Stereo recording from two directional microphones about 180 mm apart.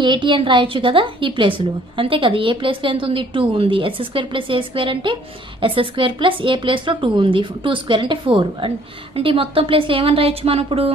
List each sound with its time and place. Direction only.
0.0 s a woman's voice: 25° right (ahead or behind)